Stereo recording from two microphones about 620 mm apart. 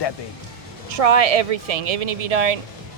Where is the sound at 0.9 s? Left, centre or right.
Right.